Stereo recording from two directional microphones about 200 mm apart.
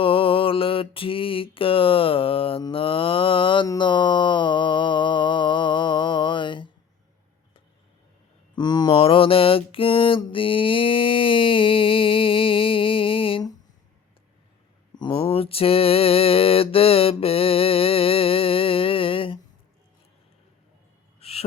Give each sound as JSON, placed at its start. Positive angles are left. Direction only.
{"t": 0.0, "sound": "mantra", "side_deg": 25}
{"t": 8.5, "sound": "mantra", "side_deg": 20}
{"t": 14.9, "sound": "mantra", "side_deg": 20}
{"t": 21.2, "sound": "a sound", "side_deg": 30}